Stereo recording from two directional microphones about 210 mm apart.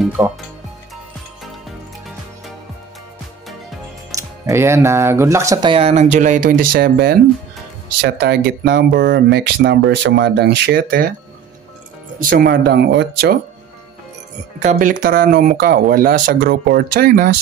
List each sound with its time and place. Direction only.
0.2 s speech: 15° right (ahead or behind)
4.1 s speech: 15° right (ahead or behind); by 11.1 s 45° right (ahead or behind)
12.2 s speech: 40° right (ahead or behind)
14.6 s speech: 35° right (ahead or behind)